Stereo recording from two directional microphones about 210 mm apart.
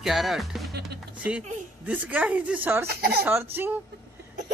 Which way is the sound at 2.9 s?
50° right (ahead or behind).